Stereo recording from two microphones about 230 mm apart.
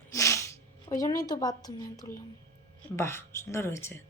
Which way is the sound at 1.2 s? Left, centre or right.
Centre.